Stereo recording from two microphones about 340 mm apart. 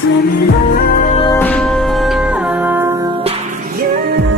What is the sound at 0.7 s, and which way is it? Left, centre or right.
Music, left.